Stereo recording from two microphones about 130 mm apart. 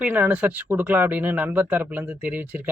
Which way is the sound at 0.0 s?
15° right (ahead or behind).